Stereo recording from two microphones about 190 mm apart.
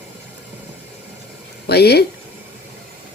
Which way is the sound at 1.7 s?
55° left (ahead or behind).